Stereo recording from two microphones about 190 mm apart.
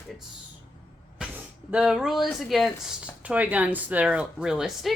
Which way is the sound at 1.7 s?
5° right (ahead or behind).